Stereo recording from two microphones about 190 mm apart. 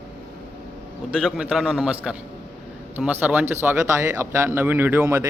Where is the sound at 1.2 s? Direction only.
5° right (ahead or behind).